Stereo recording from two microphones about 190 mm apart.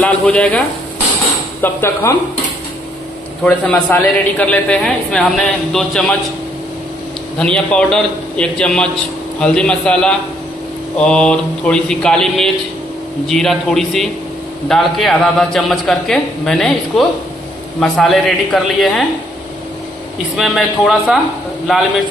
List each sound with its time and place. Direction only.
0.0 s a man's voice: 5° left (ahead or behind)
3.4 s a man's voice: 5° left (ahead or behind)
7.3 s a man's voice: 5° left (ahead or behind)
20.3 s a man's voice: centre (ahead or behind)